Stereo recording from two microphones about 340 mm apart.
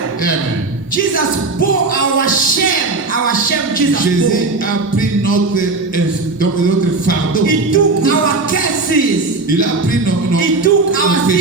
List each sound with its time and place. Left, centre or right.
2.1 s music: left
7.1 s music: left
10.3 s music: left